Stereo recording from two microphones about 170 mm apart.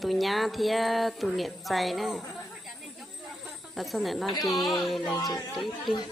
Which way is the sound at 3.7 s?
Centre (ahead or behind).